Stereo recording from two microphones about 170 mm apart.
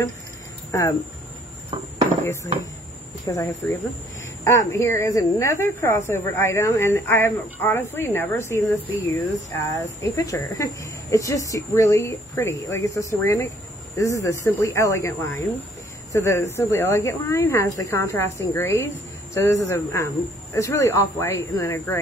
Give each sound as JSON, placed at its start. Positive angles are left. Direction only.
{"t": 0.7, "sound": "speech", "side_deg": 15}
{"t": 3.3, "sound": "a woman's voice", "side_deg": 20}